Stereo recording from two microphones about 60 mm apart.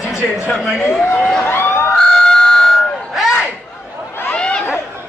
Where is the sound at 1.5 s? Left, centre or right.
Left.